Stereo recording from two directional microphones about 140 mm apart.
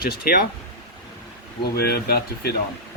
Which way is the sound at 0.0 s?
90° left.